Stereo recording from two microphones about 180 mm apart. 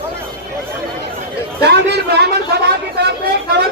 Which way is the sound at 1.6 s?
65° right (ahead or behind).